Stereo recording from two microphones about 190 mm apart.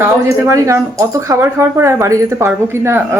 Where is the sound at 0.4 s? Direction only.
15° right (ahead or behind).